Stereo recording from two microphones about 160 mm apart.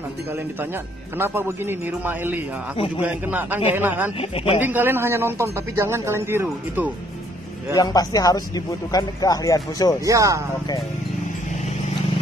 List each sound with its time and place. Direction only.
1.1 s speech: 15° right (ahead or behind)
7.7 s a man's voice: 25° left (ahead or behind)
10.0 s speech: 20° right (ahead or behind)